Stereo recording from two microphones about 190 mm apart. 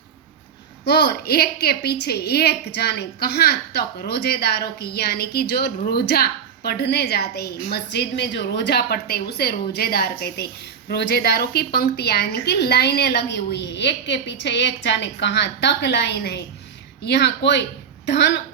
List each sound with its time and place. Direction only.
0.9 s a woman's voice: 60° left (ahead or behind)